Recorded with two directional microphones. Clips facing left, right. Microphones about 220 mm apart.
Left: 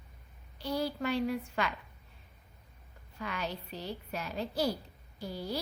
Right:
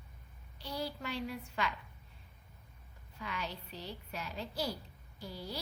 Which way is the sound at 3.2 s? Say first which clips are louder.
Left 4 dB; 50° left (ahead or behind).